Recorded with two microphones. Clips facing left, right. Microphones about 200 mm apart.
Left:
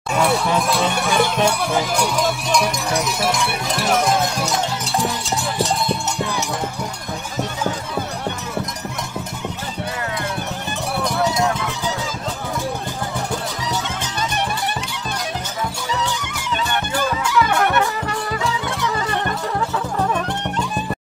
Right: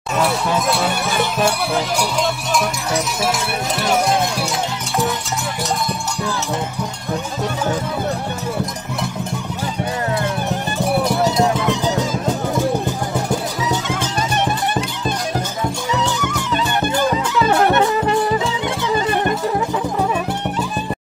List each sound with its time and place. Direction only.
0.7 s speech: 5° right (ahead or behind)
17.2 s music: 30° right (ahead or behind)